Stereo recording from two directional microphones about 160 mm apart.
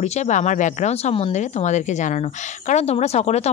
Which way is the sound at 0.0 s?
45° left (ahead or behind).